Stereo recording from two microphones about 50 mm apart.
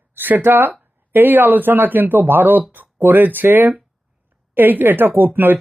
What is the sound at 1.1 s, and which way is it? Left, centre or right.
Speech, right.